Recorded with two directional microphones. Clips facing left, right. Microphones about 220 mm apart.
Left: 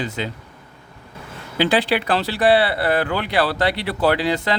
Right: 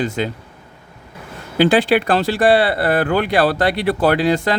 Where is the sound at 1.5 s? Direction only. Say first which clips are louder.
Right 5 dB; 50° right (ahead or behind).